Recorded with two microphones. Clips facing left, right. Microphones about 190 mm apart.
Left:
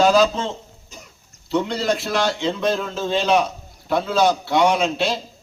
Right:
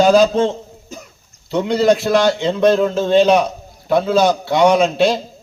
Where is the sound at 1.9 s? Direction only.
Centre (ahead or behind).